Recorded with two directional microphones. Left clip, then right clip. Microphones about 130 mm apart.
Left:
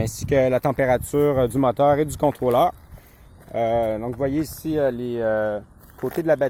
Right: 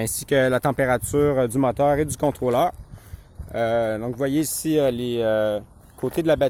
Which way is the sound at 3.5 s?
15° right (ahead or behind).